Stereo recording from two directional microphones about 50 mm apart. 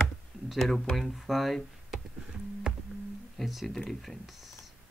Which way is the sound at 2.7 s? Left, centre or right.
Centre.